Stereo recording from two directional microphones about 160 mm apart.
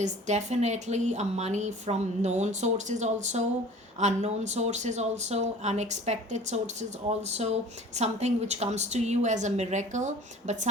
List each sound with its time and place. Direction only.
0.0 s speech: 45° right (ahead or behind)